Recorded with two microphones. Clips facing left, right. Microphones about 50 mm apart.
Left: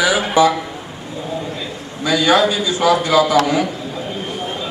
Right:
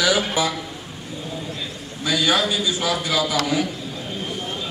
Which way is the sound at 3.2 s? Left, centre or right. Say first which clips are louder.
Left 8 dB; left.